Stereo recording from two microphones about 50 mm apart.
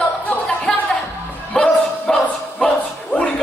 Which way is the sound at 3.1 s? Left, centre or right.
Left.